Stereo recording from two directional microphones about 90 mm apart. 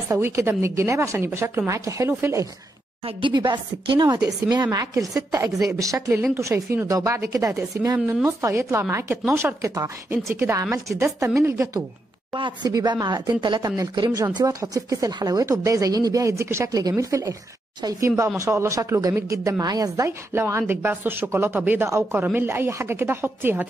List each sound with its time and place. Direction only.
0.2 s speech: 25° right (ahead or behind)
3.2 s a woman's voice: 60° right (ahead or behind)
4.9 s a woman's voice: 35° right (ahead or behind)
12.6 s speech: 50° right (ahead or behind)
13.6 s a woman's voice: 45° right (ahead or behind)
20.1 s speech: 30° right (ahead or behind)